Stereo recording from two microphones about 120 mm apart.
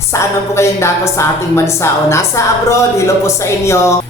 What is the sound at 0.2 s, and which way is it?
A woman's voice, 25° left (ahead or behind).